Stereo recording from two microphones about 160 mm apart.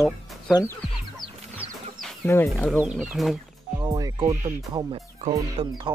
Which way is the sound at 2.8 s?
5° right (ahead or behind).